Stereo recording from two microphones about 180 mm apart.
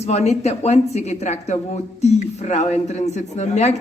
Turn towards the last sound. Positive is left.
turn(degrees=40)  # may be behind; listen again after turning